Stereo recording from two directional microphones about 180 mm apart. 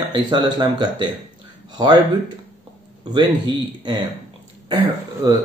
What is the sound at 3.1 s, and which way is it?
Speech, 25° right (ahead or behind).